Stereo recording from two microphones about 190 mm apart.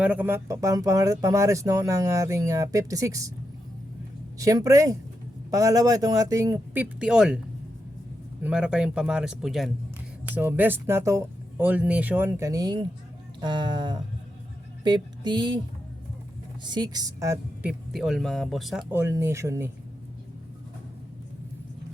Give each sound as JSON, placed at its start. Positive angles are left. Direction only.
{"t": 0.0, "sound": "speech", "side_deg": -10}
{"t": 4.4, "sound": "speech", "side_deg": -15}
{"t": 8.4, "sound": "speech", "side_deg": -5}
{"t": 16.6, "sound": "speech", "side_deg": -20}